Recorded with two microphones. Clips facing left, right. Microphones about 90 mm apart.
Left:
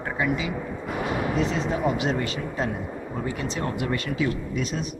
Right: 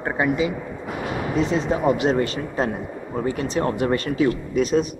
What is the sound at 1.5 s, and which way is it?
Speech, 30° right (ahead or behind).